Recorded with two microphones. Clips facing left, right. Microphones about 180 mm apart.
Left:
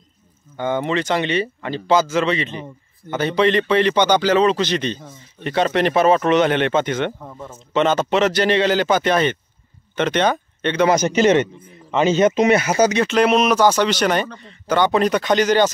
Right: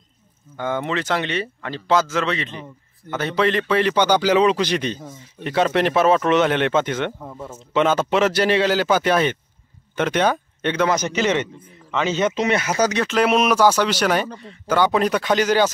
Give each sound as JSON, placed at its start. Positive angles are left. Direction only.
{"t": 0.6, "sound": "speech", "side_deg": 0}
{"t": 11.0, "sound": "a man's voice", "side_deg": 45}
{"t": 12.4, "sound": "speech", "side_deg": 10}